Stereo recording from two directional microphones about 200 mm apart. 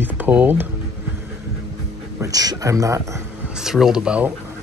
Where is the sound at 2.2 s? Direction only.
20° right (ahead or behind).